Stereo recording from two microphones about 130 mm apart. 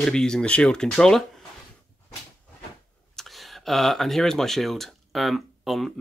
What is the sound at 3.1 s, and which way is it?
Speech, centre (ahead or behind).